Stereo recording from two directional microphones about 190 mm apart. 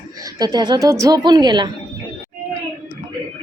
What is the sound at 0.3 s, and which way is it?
A woman's voice, 20° right (ahead or behind).